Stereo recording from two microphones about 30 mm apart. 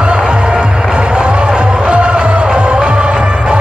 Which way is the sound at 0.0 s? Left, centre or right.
Right.